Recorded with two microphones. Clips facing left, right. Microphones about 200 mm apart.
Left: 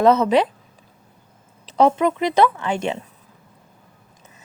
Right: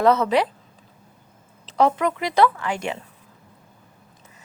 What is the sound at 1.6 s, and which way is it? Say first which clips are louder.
A woman's voice: left 3 dB; 20° left (ahead or behind).